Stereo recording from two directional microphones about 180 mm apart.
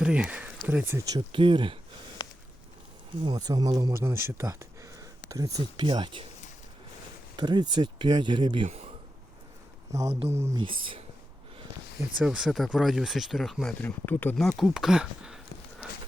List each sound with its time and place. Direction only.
0.0 s speech: 5° right (ahead or behind)
1.3 s speech: 30° right (ahead or behind)
3.2 s speech: 25° right (ahead or behind)
7.3 s speech: 25° right (ahead or behind)
9.9 s speech: 15° right (ahead or behind)
10.6 s speech: 30° right (ahead or behind)
12.2 s speech: 5° right (ahead or behind)